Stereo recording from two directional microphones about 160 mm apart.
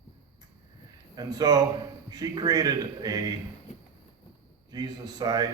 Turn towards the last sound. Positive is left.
turn(degrees=-25)  # may be behind; listen again after turning